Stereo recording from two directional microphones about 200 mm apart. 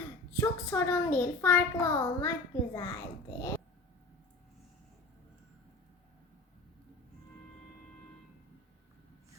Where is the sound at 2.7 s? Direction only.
20° left (ahead or behind).